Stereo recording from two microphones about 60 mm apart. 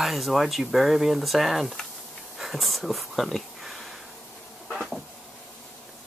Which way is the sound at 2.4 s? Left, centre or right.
Centre.